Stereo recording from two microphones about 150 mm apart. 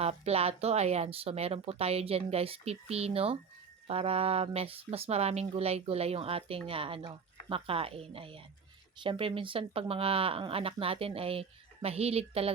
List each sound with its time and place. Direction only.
0.0 s speech: 45° right (ahead or behind)